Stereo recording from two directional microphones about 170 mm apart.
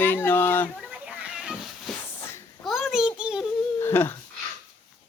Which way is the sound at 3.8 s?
15° left (ahead or behind).